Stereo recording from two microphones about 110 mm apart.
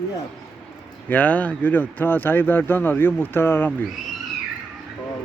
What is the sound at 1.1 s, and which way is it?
Speech, 15° left (ahead or behind).